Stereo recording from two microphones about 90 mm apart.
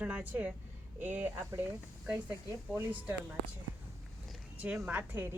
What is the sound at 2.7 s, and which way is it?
Speech, 20° right (ahead or behind).